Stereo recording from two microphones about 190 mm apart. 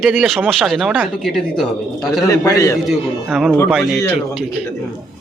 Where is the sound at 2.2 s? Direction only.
15° left (ahead or behind).